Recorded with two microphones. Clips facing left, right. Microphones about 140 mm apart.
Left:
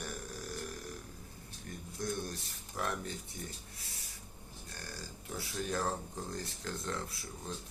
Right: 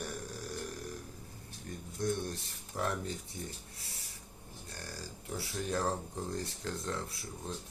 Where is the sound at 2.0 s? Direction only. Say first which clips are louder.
Right 4 dB; 30° right (ahead or behind).